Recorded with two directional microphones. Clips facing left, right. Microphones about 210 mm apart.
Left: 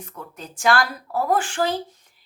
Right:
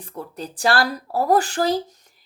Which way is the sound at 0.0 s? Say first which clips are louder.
Right 5 dB; 35° right (ahead or behind).